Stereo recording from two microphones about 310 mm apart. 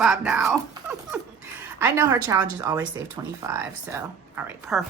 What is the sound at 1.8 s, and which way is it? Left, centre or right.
Speech, centre.